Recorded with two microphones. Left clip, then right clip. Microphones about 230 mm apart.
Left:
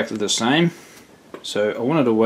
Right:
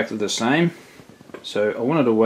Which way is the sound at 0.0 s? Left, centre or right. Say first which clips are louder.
Left 1 dB; centre.